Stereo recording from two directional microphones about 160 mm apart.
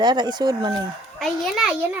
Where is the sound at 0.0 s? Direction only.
25° right (ahead or behind).